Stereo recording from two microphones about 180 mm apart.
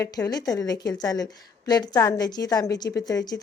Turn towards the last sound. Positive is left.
turn(degrees=20)  # may be behind; listen again after turning